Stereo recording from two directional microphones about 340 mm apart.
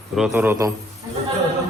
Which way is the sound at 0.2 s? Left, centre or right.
Centre.